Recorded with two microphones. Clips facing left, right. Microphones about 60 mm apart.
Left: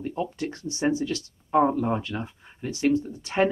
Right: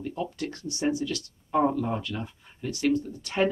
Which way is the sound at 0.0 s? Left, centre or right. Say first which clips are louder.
Left 2 dB; left.